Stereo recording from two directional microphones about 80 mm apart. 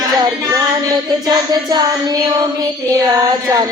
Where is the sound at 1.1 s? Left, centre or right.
Right.